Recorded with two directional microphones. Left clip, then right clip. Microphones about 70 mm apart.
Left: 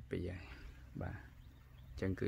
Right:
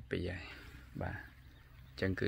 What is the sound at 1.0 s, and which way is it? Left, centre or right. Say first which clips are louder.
Speech: right 6 dB; right.